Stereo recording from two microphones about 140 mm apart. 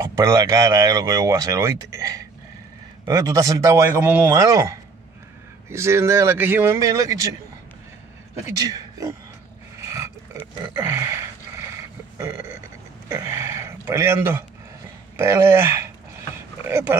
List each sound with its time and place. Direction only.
0.0 s speech: 20° right (ahead or behind)
8.5 s speech: 25° right (ahead or behind)
9.8 s a sound: 20° right (ahead or behind)
13.1 s speech: 25° right (ahead or behind)